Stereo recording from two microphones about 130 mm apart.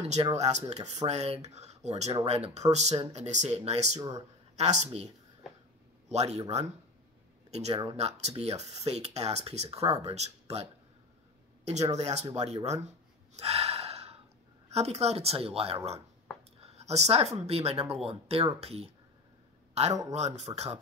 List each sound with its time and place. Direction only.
0.4 s a man's voice: 55° right (ahead or behind)
7.5 s speech: 55° right (ahead or behind)
13.3 s gasp: 55° right (ahead or behind)
14.7 s speech: 55° right (ahead or behind)
20.1 s speech: 55° right (ahead or behind)